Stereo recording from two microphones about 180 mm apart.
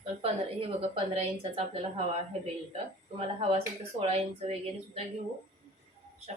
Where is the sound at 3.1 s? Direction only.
30° right (ahead or behind).